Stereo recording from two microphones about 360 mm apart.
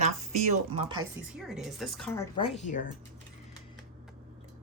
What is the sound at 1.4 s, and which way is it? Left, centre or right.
Speech, centre.